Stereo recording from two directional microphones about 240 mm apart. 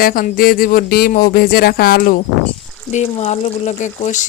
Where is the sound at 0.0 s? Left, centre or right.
Left.